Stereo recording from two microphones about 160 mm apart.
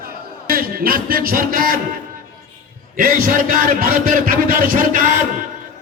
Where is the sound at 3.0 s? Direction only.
60° right (ahead or behind).